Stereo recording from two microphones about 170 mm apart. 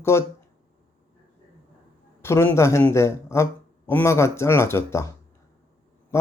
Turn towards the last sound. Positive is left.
turn(degrees=15)  # may be behind; listen again after turning